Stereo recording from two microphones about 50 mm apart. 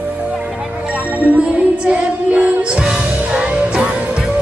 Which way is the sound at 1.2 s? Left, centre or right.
Right.